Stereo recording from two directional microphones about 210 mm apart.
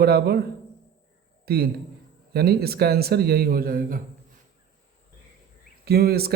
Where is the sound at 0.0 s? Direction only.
50° right (ahead or behind).